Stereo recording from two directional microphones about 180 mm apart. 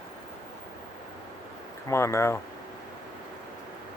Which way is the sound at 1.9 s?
15° left (ahead or behind).